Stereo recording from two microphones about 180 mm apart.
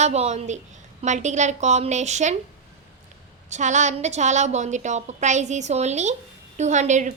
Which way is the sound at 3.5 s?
40° right (ahead or behind).